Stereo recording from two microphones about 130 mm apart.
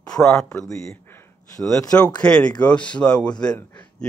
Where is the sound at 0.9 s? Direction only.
25° left (ahead or behind).